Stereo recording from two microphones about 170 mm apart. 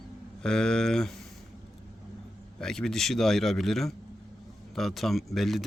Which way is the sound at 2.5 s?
5° left (ahead or behind).